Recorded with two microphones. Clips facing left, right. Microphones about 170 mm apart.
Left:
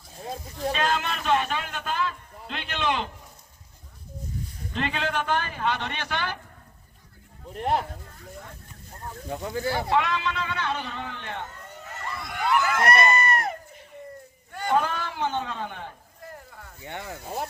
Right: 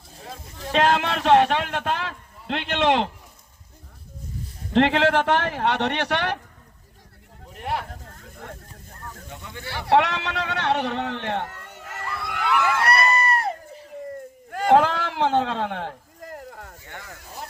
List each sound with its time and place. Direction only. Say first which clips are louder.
0.7 s speech: right 7 dB; 80° right
4.7 s a man's voice: right 10 dB; 75° right (ahead or behind)
7.5 s speech: left 3 dB; 35° left (ahead or behind)
8.1 s a sound: right 2 dB; 60° right (ahead or behind)
9.2 s speech: left 12 dB; 35° left (ahead or behind)
9.9 s a man's voice: right 8 dB; 75° right (ahead or behind)
12.6 s a sound: right 1 dB; 35° right (ahead or behind)
14.7 s a sound: right 7 dB; 85° right
16.8 s speech: left 10 dB; 20° left (ahead or behind)